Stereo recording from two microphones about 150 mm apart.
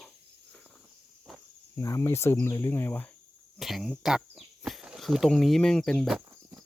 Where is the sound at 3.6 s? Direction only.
5° right (ahead or behind).